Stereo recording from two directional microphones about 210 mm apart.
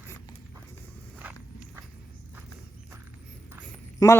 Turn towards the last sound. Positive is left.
turn(degrees=15)  # may be behind; listen again after turning